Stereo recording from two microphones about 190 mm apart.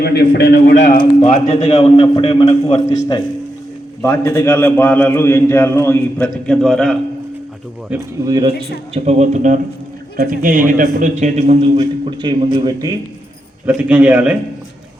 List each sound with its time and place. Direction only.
0.0 s a man's voice: 55° left (ahead or behind)
0.9 s a man's voice: 30° left (ahead or behind)
4.0 s a man's voice: 10° left (ahead or behind)
8.2 s a man's voice: 20° right (ahead or behind)
8.9 s a man's voice: 35° right (ahead or behind)
13.7 s a man's voice: 5° right (ahead or behind)